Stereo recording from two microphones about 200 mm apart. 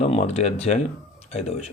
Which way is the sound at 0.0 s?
30° left (ahead or behind).